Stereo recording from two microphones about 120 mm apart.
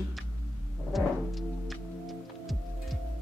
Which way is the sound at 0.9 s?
Centre (ahead or behind).